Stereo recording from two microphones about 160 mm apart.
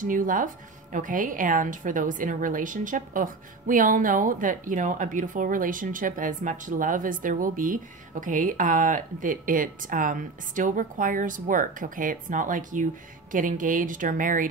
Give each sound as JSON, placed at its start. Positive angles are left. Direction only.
{"t": 0.0, "sound": "a woman's voice", "side_deg": -55}